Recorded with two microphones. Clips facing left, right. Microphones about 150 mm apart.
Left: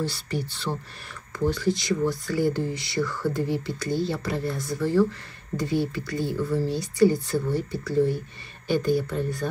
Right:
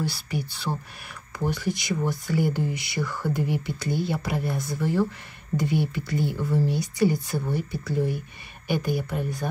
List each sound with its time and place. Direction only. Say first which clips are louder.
0.0 s speech: left 1 dB; 10° right (ahead or behind)